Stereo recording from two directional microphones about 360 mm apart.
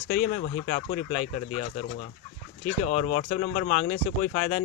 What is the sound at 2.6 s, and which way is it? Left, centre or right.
Speech, centre.